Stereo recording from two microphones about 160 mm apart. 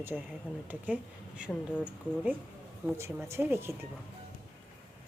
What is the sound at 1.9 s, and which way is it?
Speech, 10° right (ahead or behind).